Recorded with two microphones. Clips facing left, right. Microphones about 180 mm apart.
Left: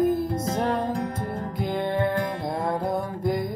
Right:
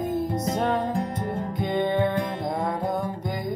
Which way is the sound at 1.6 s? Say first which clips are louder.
Right 2 dB; centre (ahead or behind).